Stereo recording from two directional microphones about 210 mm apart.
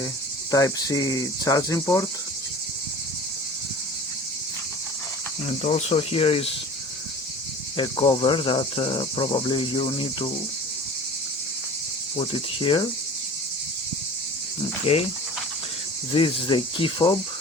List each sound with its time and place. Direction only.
0.5 s cricket: 15° left (ahead or behind)
5.6 s cricket: 30° left (ahead or behind)
7.8 s cricket: 20° left (ahead or behind)
12.3 s cricket: 25° left (ahead or behind)
14.9 s cricket: 25° left (ahead or behind)
16.1 s cricket: 25° left (ahead or behind)